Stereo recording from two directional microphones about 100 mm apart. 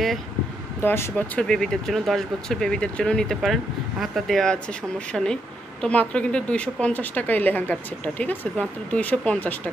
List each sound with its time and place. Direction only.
0.8 s speech: 25° left (ahead or behind)
1.1 s a woman's voice: 10° left (ahead or behind)